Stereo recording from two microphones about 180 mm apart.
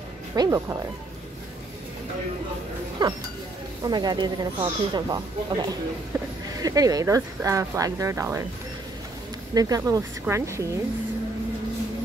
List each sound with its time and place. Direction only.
0.4 s speech: 20° right (ahead or behind)
3.0 s speech: 25° right (ahead or behind)
9.5 s speech: 20° right (ahead or behind)